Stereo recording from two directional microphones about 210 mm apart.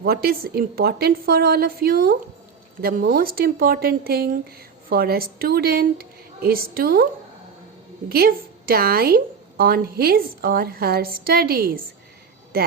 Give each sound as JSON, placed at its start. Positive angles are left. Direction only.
{"t": 0.0, "sound": "a woman's voice", "side_deg": -45}
{"t": 8.1, "sound": "a woman's voice", "side_deg": -45}